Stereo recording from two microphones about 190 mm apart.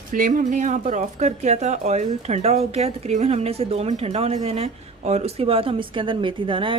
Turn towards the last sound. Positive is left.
turn(degrees=-25)  # may be behind; listen again after turning